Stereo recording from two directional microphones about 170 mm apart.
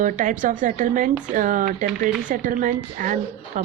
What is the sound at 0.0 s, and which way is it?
A woman's voice, 50° right (ahead or behind).